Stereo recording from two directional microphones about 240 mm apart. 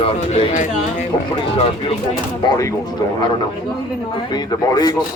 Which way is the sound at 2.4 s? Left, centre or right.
Centre.